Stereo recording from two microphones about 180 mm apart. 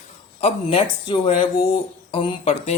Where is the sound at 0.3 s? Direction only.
35° left (ahead or behind).